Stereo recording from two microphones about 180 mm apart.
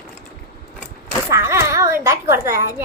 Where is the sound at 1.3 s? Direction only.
15° right (ahead or behind).